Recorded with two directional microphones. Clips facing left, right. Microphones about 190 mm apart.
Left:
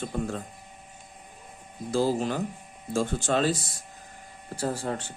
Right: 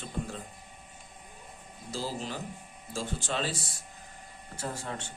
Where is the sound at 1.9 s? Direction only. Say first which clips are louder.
Left 10 dB; 55° left (ahead or behind).